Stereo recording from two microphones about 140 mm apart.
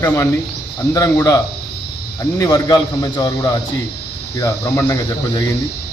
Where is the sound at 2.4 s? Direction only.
25° left (ahead or behind).